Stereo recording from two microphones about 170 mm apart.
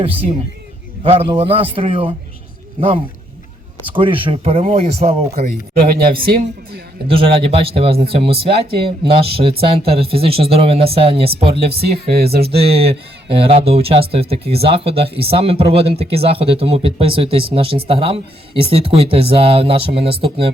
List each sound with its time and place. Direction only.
1.0 s speech: 35° right (ahead or behind)
3.9 s speech: 30° right (ahead or behind)
5.8 s speech: 60° right (ahead or behind)
7.1 s speech: 35° right (ahead or behind)
11.5 s speech: 70° right (ahead or behind)
12.5 s speech: 35° right (ahead or behind)